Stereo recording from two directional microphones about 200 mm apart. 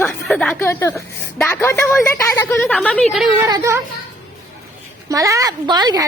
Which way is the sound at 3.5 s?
15° right (ahead or behind).